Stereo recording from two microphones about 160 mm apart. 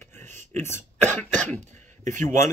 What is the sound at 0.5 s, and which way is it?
Speech, 15° left (ahead or behind).